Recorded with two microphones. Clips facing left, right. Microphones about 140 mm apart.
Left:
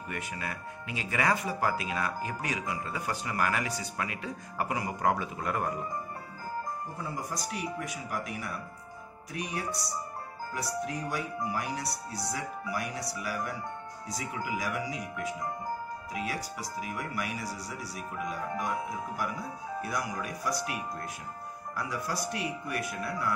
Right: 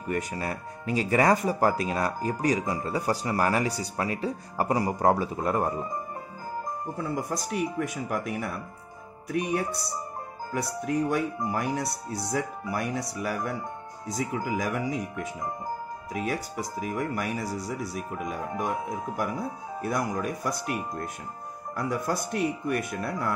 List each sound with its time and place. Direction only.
0.1 s speech: 40° right (ahead or behind)
7.0 s speech: 55° right (ahead or behind)
11.5 s speech: 50° right (ahead or behind)